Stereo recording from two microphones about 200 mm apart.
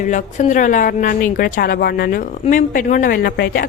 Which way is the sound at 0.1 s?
40° left (ahead or behind).